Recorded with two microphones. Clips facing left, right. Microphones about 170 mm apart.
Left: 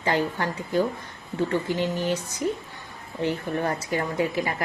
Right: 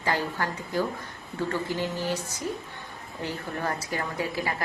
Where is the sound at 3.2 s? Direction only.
20° left (ahead or behind).